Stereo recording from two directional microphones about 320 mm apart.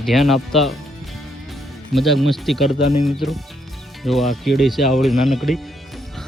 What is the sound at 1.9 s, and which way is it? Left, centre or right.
Speech, centre.